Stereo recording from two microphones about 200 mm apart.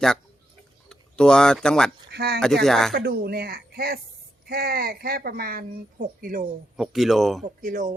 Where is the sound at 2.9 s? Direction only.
50° right (ahead or behind).